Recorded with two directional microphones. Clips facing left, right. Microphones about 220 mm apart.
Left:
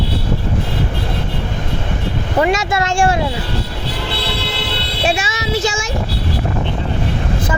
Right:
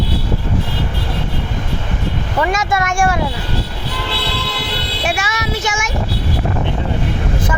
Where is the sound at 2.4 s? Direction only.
25° left (ahead or behind).